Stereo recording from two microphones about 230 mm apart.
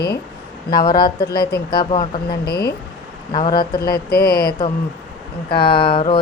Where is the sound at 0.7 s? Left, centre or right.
Centre.